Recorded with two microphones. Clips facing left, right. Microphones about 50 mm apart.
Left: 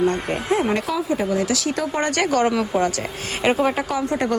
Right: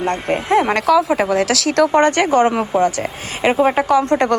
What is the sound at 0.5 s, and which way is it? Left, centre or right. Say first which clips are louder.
Speech: right 8 dB; right.